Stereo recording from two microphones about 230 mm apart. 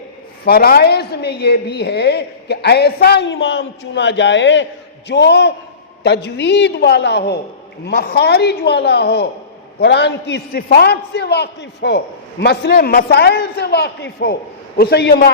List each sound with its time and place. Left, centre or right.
0.4 s a man's voice: left